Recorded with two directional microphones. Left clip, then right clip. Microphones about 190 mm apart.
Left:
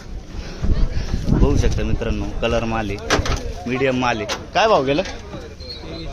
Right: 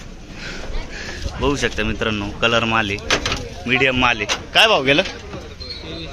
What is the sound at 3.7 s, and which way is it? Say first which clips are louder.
Speech: right 3 dB; 5° left (ahead or behind).